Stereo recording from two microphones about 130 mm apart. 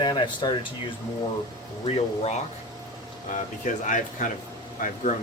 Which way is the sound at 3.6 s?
80° left.